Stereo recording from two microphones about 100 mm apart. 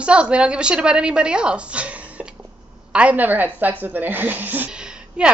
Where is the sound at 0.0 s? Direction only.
10° right (ahead or behind).